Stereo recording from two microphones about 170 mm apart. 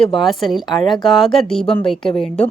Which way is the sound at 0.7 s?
25° left (ahead or behind).